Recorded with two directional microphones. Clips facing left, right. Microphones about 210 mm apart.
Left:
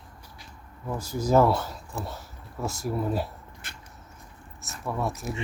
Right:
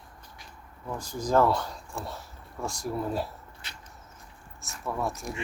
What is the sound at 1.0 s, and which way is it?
Speech, 10° left (ahead or behind).